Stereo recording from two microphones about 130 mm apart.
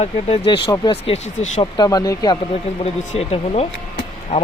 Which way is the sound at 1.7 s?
30° left (ahead or behind).